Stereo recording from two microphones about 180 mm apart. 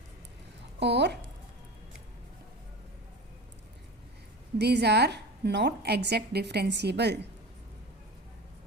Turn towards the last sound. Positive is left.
turn(degrees=-70)  # may be behind; listen again after turning